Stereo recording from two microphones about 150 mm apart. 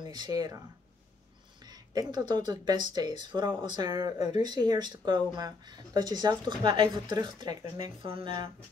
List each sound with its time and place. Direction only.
0.0 s speech: 30° right (ahead or behind)
1.7 s speech: 25° right (ahead or behind)